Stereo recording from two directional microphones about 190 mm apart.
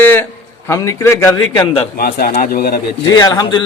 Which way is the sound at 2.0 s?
55° left (ahead or behind).